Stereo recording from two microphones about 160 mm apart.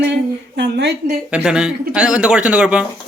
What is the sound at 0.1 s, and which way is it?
Speech, 90° right.